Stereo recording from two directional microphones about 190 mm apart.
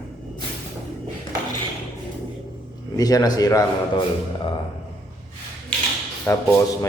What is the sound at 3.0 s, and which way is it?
Speech, 20° left (ahead or behind).